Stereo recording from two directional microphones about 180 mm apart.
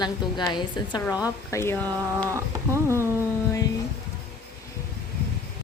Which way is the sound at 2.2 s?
15° right (ahead or behind).